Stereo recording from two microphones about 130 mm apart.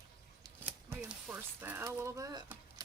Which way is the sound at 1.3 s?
15° right (ahead or behind).